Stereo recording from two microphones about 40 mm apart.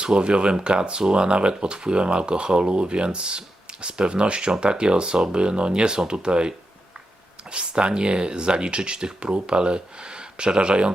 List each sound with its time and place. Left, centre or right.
0.0 s speech: right
7.5 s speech: right